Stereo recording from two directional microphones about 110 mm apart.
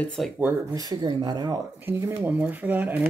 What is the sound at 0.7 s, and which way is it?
Speech, 35° right (ahead or behind).